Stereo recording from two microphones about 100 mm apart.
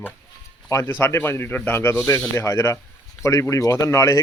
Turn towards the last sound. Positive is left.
turn(degrees=35)  # may be behind; listen again after turning